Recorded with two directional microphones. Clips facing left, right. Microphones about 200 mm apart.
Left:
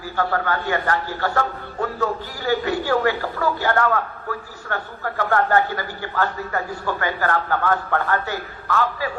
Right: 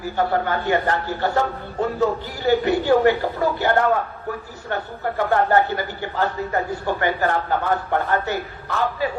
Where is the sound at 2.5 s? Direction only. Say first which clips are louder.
Right 4 dB; 20° right (ahead or behind).